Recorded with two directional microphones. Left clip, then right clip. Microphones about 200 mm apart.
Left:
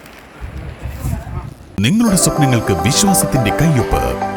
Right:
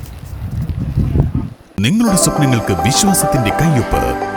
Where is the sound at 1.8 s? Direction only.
Centre (ahead or behind).